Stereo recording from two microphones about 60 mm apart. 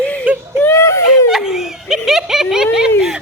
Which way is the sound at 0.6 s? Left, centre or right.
Left.